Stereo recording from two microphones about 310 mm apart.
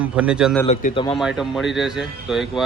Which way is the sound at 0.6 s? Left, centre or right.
Centre.